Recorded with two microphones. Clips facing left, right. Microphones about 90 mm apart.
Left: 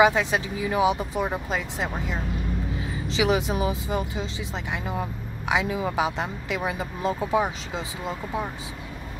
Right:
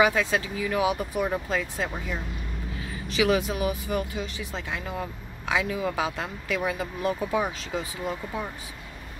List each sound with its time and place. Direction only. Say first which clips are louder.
0.0 s speech: left 2 dB; 20° left (ahead or behind)